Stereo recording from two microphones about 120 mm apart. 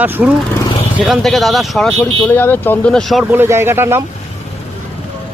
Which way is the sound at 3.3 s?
20° right (ahead or behind).